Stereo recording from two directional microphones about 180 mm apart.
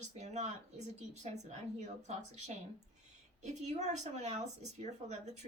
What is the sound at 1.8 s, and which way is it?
Speech, 40° right (ahead or behind).